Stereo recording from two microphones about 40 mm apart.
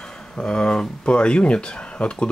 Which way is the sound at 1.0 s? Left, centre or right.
Left.